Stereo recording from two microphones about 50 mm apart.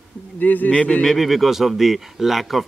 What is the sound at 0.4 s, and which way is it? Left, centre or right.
Speech, left.